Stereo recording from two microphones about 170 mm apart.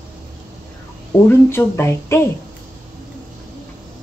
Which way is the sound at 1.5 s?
15° left (ahead or behind).